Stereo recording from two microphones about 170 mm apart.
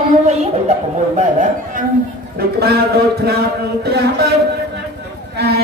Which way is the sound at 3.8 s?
70° right (ahead or behind).